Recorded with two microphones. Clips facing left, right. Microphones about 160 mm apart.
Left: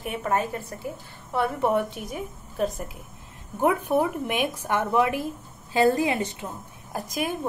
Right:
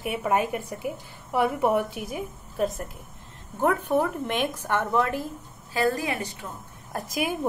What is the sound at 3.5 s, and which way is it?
A woman's voice, 10° left (ahead or behind).